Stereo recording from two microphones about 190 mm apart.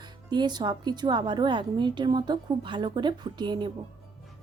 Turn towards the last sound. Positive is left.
turn(degrees=-25)  # may be behind; listen again after turning